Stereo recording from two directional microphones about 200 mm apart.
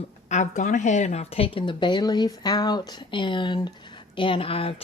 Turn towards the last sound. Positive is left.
turn(degrees=30)  # may be behind; listen again after turning